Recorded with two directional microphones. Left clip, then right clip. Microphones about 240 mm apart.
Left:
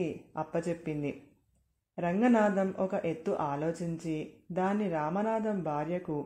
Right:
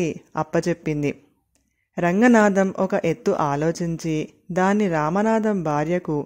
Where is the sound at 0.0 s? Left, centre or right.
Right.